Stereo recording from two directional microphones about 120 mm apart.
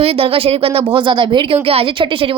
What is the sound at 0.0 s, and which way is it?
Speech, 50° right (ahead or behind).